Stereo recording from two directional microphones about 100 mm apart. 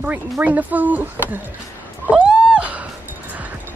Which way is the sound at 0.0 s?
15° right (ahead or behind).